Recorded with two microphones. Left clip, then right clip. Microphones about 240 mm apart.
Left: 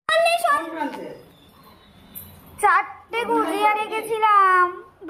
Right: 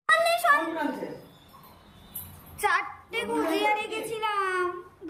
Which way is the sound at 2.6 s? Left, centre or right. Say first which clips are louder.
Left 8 dB; centre.